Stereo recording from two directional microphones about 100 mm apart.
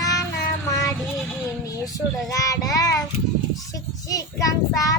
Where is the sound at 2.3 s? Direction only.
35° left (ahead or behind).